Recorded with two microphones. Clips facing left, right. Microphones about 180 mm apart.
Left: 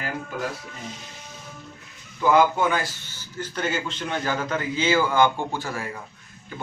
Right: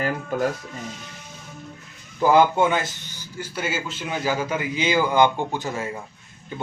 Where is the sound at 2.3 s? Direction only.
25° right (ahead or behind).